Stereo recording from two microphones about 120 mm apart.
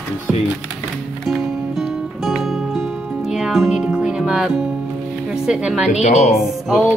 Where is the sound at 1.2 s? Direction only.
Centre (ahead or behind).